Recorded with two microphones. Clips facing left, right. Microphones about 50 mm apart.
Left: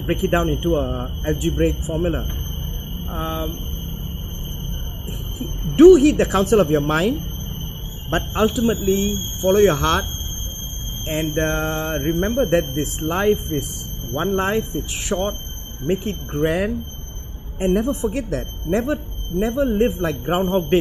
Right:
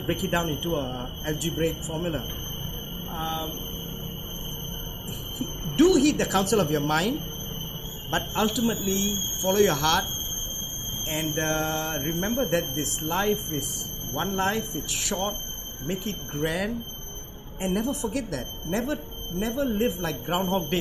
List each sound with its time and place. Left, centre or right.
0.0 s speech: left
5.8 s speech: left
11.1 s speech: left